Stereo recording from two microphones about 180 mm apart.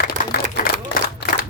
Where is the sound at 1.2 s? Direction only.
65° left (ahead or behind).